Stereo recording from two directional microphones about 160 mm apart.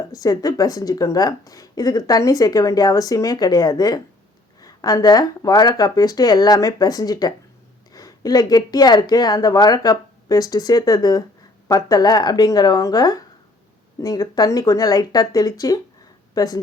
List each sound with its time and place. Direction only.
0.1 s a woman's voice: 20° left (ahead or behind)